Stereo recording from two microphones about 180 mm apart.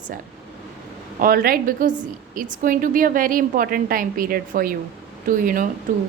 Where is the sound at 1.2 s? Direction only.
55° right (ahead or behind).